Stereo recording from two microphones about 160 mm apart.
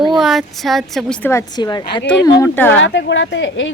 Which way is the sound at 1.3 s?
20° left (ahead or behind).